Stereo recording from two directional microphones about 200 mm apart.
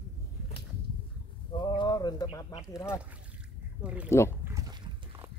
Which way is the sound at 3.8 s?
5° right (ahead or behind).